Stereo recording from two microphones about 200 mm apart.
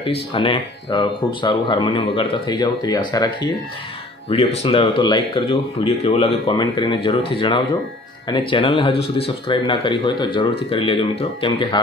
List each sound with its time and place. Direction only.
0.0 s speech: 25° left (ahead or behind)